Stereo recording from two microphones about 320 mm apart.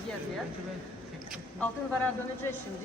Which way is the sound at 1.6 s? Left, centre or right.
Centre.